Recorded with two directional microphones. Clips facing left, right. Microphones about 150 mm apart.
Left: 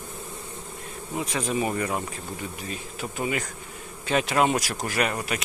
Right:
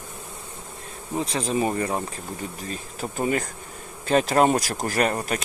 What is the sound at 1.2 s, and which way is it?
Speech, 30° right (ahead or behind).